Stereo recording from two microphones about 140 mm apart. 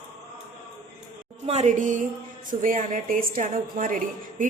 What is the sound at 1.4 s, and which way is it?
A woman's voice, 55° right (ahead or behind).